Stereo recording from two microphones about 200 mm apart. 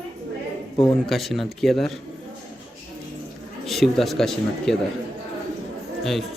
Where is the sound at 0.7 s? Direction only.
25° left (ahead or behind).